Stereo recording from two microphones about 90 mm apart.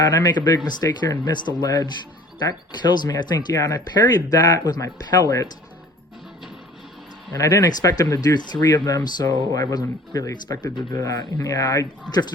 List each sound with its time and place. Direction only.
0.0 s speech: 45° left (ahead or behind)
7.3 s speech: 35° left (ahead or behind)